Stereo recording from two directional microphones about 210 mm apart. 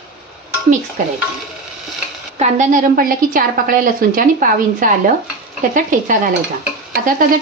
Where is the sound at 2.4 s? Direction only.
40° right (ahead or behind).